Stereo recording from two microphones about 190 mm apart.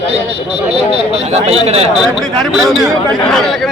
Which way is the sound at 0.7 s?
30° right (ahead or behind).